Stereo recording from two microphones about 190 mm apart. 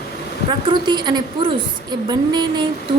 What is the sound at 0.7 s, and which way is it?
A woman's voice, 25° right (ahead or behind).